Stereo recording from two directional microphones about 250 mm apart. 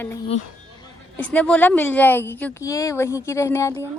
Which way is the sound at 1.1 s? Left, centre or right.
Centre.